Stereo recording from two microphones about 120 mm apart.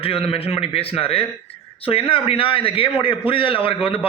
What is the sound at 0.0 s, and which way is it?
A man's voice, 50° left (ahead or behind).